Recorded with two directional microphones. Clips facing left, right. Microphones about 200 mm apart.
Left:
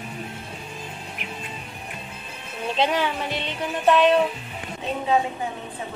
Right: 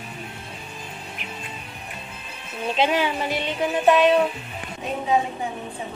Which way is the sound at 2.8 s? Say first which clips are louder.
Right 1 dB; 10° right (ahead or behind).